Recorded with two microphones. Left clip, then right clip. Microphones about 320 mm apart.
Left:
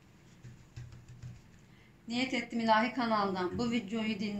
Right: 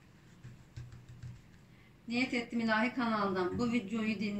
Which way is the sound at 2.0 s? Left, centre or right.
Centre.